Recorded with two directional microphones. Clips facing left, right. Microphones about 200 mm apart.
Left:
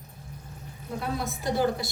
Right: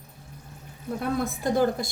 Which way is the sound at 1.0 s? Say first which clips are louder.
Right 4 dB; 50° right (ahead or behind).